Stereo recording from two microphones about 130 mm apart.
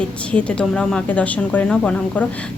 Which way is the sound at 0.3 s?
10° left (ahead or behind).